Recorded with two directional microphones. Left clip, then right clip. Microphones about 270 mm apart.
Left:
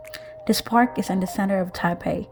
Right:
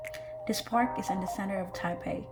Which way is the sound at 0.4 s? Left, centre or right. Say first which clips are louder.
Left 9 dB; left.